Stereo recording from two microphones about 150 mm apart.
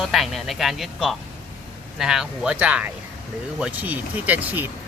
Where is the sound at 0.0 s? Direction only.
Centre (ahead or behind).